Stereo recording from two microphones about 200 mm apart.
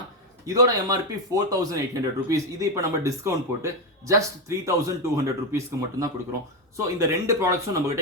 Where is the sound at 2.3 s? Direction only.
15° right (ahead or behind).